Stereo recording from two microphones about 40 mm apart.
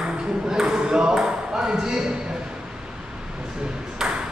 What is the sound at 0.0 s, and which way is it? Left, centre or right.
Ping, centre.